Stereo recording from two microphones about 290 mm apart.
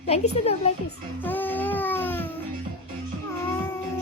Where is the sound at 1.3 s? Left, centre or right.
Centre.